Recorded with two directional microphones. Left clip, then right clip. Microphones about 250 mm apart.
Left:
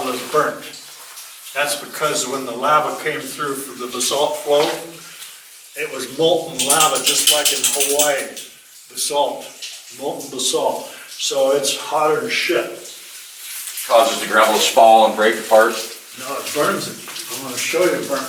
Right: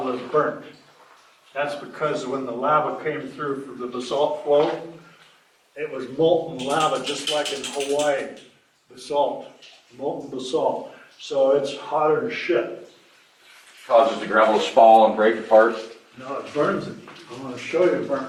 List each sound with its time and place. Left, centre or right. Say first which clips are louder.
0.0 s a sound: left 3 dB; centre
1.5 s a man's voice: left 5 dB; centre
3.8 s speech: left 4 dB; centre
6.2 s speech: left 3 dB; right
6.6 s speech: left 5 dB; centre
9.2 s speech: left 3 dB; right
10.3 s speech: left 7 dB; centre
10.6 s speech: left 1 dB; right
11.4 s speech: left 1 dB; centre
13.9 s speech: left 3 dB; centre
17.1 s water: left 9 dB; centre
17.5 s speech: left 3 dB; centre